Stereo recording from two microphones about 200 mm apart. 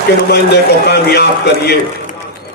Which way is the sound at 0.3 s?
55° left (ahead or behind).